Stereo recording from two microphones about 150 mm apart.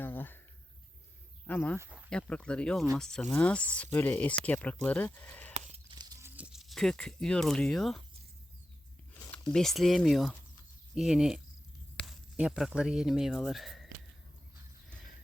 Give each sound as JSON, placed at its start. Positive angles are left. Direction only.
{"t": 0.0, "sound": "a sound", "side_deg": 15}
{"t": 1.5, "sound": "speech", "side_deg": 10}
{"t": 1.8, "sound": "speech", "side_deg": -10}
{"t": 2.0, "sound": "speech", "side_deg": 5}
{"t": 5.9, "sound": "a sound", "side_deg": -25}
{"t": 6.3, "sound": "speech", "side_deg": -5}
{"t": 9.5, "sound": "speech", "side_deg": 0}